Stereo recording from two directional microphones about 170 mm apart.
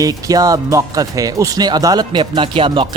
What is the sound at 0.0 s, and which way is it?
Speech, 20° right (ahead or behind).